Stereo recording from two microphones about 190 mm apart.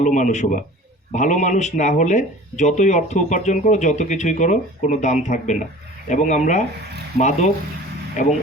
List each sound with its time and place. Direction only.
0.0 s speech: 40° left (ahead or behind)